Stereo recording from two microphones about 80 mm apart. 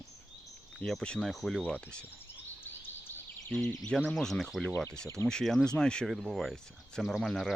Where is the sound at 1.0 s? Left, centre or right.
Centre.